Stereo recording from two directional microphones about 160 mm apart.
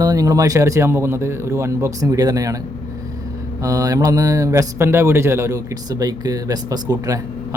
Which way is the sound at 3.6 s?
20° right (ahead or behind).